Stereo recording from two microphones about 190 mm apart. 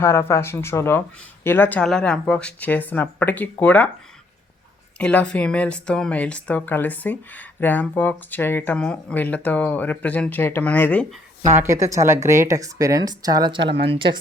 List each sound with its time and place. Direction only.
0.0 s speech: 15° left (ahead or behind)
4.9 s speech: 5° left (ahead or behind)
11.6 s speech: 15° right (ahead or behind)